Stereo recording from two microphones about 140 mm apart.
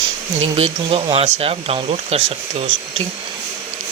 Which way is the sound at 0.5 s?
40° right (ahead or behind).